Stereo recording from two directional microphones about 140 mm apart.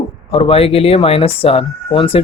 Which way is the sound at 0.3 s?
40° left (ahead or behind).